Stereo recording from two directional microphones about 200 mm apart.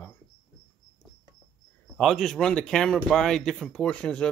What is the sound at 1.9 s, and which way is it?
Speech, centre (ahead or behind).